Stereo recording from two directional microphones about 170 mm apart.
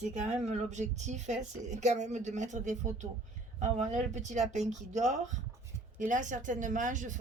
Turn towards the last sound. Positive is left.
turn(degrees=-50)  # may be behind; listen again after turning